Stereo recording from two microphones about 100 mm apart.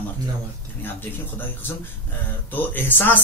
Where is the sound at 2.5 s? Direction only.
20° left (ahead or behind).